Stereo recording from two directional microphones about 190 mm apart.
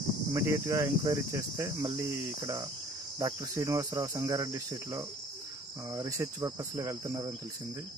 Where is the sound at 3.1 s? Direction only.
20° right (ahead or behind).